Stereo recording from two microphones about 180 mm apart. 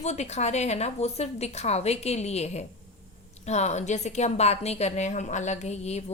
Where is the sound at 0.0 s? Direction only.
40° left (ahead or behind).